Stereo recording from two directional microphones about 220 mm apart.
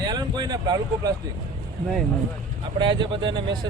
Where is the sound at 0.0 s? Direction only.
20° right (ahead or behind).